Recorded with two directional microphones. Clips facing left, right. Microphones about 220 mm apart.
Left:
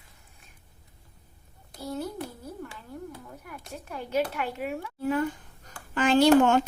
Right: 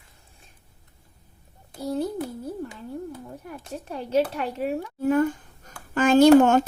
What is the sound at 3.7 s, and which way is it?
Speech, 35° right (ahead or behind).